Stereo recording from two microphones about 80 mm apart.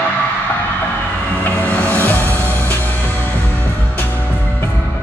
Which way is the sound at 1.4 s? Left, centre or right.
Centre.